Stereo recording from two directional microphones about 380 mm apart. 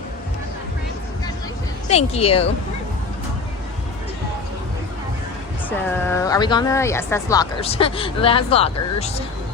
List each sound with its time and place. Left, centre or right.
1.9 s speech: centre
5.6 s speech: centre